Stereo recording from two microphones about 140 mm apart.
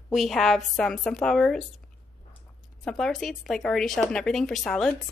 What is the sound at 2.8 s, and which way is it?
Speech, 5° left (ahead or behind).